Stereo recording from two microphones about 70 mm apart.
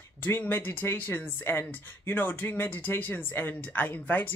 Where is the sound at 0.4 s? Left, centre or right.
Left.